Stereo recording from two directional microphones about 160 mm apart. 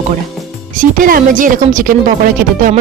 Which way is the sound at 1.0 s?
60° right (ahead or behind).